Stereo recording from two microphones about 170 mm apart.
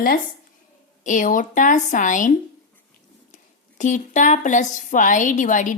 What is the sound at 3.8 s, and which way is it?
A woman's voice, 45° left (ahead or behind).